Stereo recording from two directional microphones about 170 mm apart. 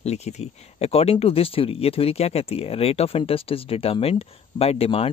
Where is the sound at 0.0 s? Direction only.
40° left (ahead or behind).